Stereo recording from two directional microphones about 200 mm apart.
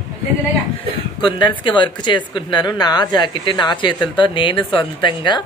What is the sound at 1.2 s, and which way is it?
Speech, 25° left (ahead or behind).